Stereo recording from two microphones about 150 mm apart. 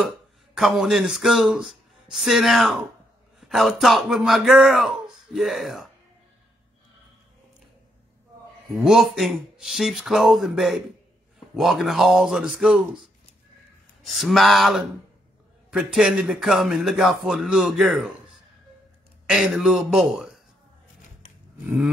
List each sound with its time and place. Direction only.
0.6 s speech: centre (ahead or behind)
8.7 s speech: centre (ahead or behind)
14.0 s speech: centre (ahead or behind)
19.2 s speech: 5° right (ahead or behind)